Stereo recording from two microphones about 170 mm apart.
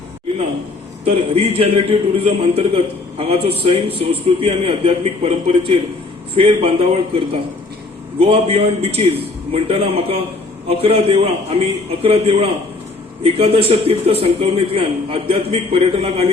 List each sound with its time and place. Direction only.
1.0 s a man's voice: 35° right (ahead or behind)
8.2 s a man's voice: 35° right (ahead or behind)